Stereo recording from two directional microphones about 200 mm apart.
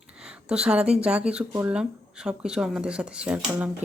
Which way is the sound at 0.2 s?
5° right (ahead or behind).